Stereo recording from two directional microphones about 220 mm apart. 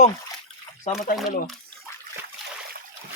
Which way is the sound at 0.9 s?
35° left (ahead or behind).